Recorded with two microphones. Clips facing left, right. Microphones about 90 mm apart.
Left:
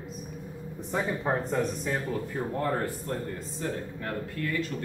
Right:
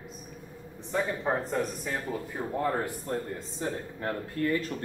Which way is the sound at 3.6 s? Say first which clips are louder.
Even; 20° right (ahead or behind).